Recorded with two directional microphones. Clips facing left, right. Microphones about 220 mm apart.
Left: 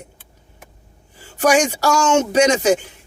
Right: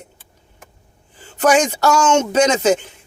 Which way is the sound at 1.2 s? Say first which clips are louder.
Right 1 dB; 10° left (ahead or behind).